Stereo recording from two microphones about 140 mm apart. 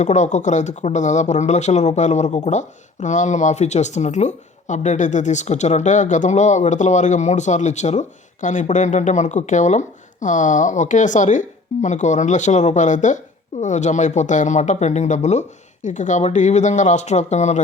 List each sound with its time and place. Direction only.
0.0 s speech: 55° left (ahead or behind)